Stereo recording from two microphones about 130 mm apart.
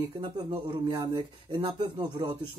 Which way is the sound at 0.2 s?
35° right (ahead or behind).